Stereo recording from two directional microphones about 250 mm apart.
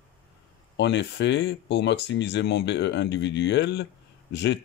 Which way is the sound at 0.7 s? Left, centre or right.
Left.